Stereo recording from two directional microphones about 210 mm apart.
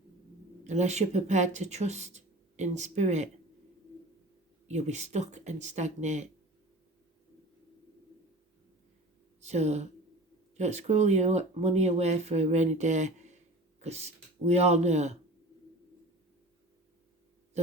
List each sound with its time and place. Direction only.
0.6 s speech: 35° right (ahead or behind)
4.7 s speech: 35° right (ahead or behind)
9.4 s speech: 35° right (ahead or behind)